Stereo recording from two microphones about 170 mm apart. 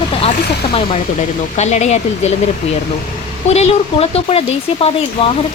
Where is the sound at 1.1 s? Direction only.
45° left (ahead or behind).